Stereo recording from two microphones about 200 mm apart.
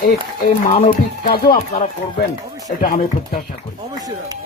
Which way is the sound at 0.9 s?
45° left (ahead or behind).